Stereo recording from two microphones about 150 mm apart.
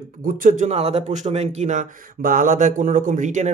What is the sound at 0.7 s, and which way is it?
Speech, 45° right (ahead or behind).